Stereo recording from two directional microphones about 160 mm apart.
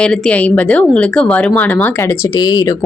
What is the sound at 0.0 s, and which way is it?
Speech, 5° left (ahead or behind).